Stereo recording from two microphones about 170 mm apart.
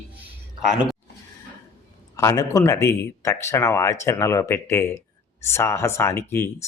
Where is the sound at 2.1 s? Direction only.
20° left (ahead or behind).